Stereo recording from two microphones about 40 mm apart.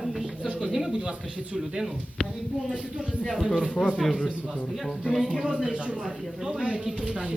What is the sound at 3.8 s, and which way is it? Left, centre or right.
Speech, centre.